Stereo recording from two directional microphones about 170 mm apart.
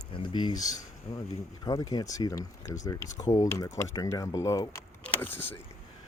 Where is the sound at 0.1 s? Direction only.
30° left (ahead or behind).